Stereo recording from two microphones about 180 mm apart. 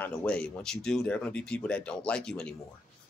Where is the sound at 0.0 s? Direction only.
5° left (ahead or behind).